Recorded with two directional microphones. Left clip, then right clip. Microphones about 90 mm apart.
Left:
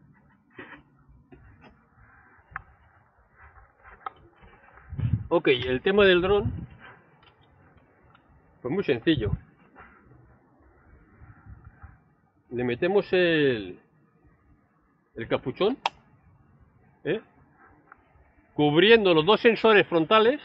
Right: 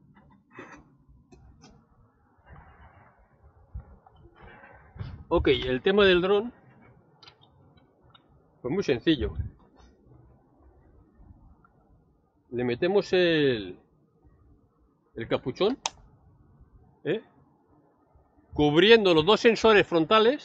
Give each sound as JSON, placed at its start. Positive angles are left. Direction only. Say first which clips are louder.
{"t": 0.5, "sound": "a sound", "louder": "left 1 dB", "side_deg": -20}
{"t": 4.5, "sound": "a sound", "louder": "right 3 dB", "side_deg": -15}
{"t": 5.3, "sound": "speech", "louder": "left 1 dB", "side_deg": -45}
{"t": 8.6, "sound": "speech", "louder": "left 1 dB", "side_deg": -50}
{"t": 12.5, "sound": "speech", "louder": "left 1 dB", "side_deg": -45}
{"t": 15.1, "sound": "speech", "louder": "left 1 dB", "side_deg": -45}
{"t": 17.0, "sound": "speech", "louder": "left 1 dB", "side_deg": -45}
{"t": 18.5, "sound": "speech", "louder": "even", "side_deg": -50}